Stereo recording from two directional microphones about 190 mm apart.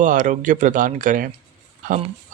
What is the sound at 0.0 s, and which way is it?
Speech, 40° right (ahead or behind).